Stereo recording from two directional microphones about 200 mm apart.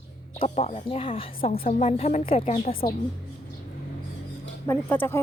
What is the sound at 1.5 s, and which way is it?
Speech, 45° left (ahead or behind).